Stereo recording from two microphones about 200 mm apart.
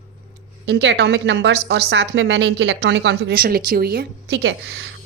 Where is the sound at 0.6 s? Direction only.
60° right (ahead or behind).